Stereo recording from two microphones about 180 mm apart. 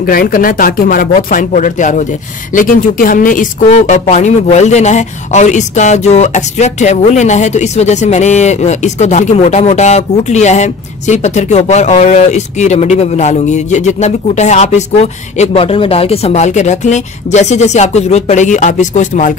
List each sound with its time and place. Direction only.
0.0 s speech: 55° left (ahead or behind)